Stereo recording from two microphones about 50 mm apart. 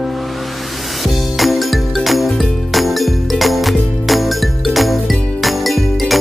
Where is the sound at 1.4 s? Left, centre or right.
Centre.